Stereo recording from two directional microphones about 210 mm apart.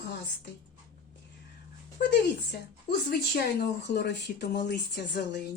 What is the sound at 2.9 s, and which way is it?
Speech, 50° left (ahead or behind).